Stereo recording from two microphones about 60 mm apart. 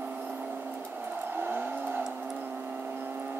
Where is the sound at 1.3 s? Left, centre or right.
Right.